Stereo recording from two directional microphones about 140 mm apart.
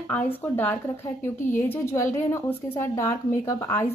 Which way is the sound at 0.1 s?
15° left (ahead or behind).